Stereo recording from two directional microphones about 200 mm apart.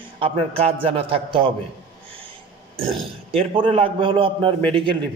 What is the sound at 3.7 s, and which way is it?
Speech, 25° right (ahead or behind).